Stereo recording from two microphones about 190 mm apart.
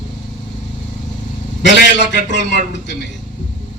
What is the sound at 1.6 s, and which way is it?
Speech, 65° left (ahead or behind).